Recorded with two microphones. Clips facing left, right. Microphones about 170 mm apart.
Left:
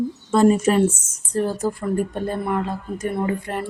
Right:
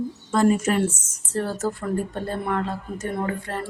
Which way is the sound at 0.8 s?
15° left (ahead or behind).